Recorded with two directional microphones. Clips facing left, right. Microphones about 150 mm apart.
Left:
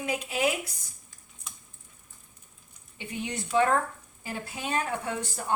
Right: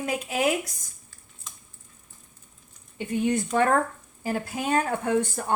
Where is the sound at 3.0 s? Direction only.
50° right (ahead or behind).